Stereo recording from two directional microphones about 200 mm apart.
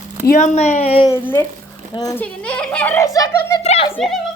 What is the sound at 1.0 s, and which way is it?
A child's voice, 10° left (ahead or behind).